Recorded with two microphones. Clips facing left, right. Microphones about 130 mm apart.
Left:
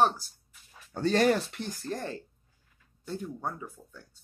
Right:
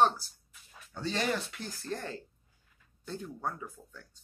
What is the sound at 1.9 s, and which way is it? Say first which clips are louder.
Speech: left 2 dB; 15° left (ahead or behind).